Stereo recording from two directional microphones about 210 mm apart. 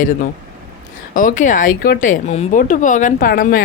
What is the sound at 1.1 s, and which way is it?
Speech, 40° left (ahead or behind).